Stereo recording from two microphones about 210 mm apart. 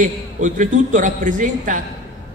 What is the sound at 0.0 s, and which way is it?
A man's voice, 35° right (ahead or behind).